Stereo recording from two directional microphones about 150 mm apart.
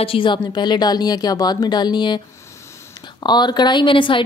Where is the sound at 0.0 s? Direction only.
35° left (ahead or behind).